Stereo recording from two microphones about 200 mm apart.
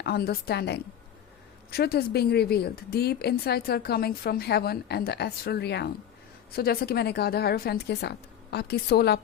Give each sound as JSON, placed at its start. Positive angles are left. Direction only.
{"t": 0.0, "sound": "a woman's voice", "side_deg": 50}